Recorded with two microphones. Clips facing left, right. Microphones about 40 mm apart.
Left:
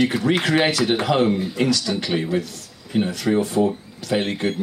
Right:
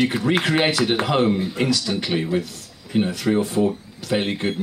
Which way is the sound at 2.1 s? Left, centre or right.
Centre.